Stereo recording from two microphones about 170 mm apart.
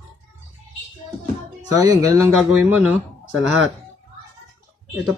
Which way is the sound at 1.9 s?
20° right (ahead or behind).